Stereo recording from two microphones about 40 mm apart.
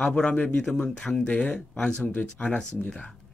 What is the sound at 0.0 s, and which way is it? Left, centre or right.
Speech, left.